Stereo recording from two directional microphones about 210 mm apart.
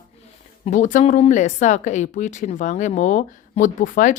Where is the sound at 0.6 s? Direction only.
35° left (ahead or behind).